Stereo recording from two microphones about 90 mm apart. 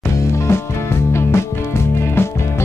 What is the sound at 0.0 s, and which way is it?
Music, 30° left (ahead or behind).